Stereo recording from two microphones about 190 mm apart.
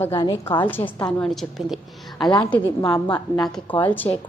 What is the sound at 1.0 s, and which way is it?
A woman's voice, 5° left (ahead or behind).